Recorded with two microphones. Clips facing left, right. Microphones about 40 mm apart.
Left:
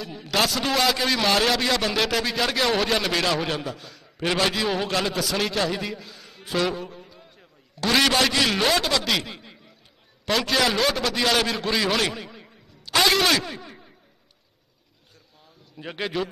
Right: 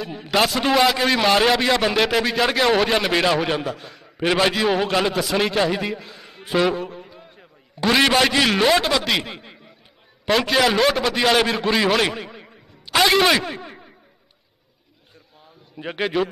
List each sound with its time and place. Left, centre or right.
0.0 s a man's voice: centre
3.6 s a man's voice: centre
7.0 s a sound: centre
10.2 s a man's voice: centre
12.0 s a sound: centre
15.7 s a man's voice: centre